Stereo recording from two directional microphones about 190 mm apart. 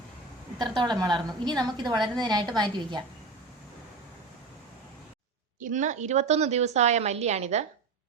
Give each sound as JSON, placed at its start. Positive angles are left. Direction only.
{"t": 0.6, "sound": "a woman's voice", "side_deg": -20}
{"t": 5.5, "sound": "a woman's voice", "side_deg": -40}